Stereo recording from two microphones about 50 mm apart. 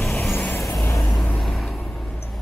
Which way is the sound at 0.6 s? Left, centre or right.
Left.